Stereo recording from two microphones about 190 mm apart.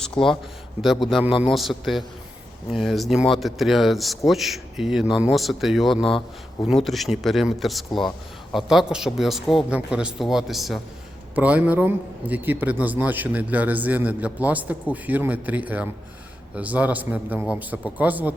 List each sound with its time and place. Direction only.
0.2 s a man's voice: 5° left (ahead or behind)